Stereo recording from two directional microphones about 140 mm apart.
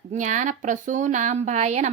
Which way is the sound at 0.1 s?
60° right (ahead or behind).